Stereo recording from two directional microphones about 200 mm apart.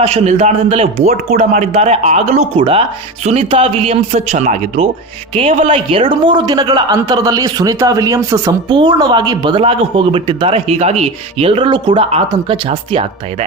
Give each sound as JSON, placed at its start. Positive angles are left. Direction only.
{"t": 0.0, "sound": "a man's voice", "side_deg": -30}